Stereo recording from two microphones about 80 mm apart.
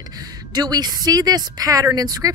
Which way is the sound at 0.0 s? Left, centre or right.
Right.